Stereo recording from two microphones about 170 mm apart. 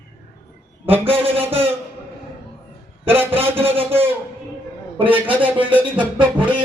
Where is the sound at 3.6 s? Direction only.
35° right (ahead or behind).